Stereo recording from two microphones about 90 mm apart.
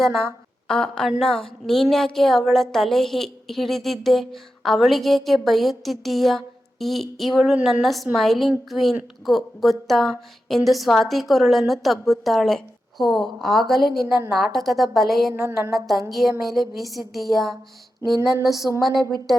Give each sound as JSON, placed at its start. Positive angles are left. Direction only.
{"t": 0.7, "sound": "a woman's voice", "side_deg": 5}
{"t": 15.3, "sound": "a sound", "side_deg": -30}
{"t": 15.7, "sound": "a woman's voice", "side_deg": 0}
{"t": 18.8, "sound": "a woman's voice", "side_deg": 0}